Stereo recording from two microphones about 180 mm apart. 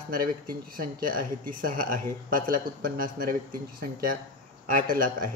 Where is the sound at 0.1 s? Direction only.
55° right (ahead or behind).